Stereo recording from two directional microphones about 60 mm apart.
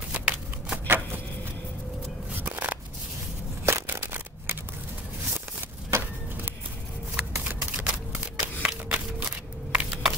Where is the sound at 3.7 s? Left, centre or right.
Right.